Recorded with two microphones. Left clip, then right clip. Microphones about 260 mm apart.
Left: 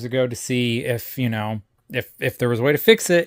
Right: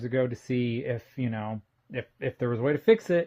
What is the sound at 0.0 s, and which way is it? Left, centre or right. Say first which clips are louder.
Speech: left 6 dB; left.